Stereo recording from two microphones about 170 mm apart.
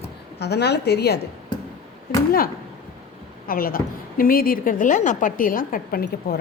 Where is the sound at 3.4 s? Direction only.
60° left (ahead or behind).